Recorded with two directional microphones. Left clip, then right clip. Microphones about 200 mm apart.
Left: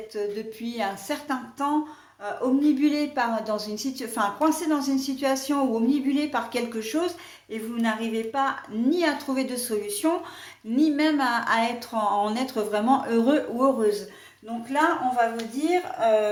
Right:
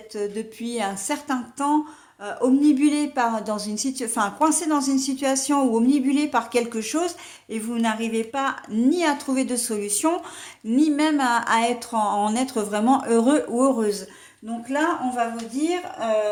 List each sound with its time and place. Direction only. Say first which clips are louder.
0.1 s a woman's voice: right 2 dB; 45° right (ahead or behind)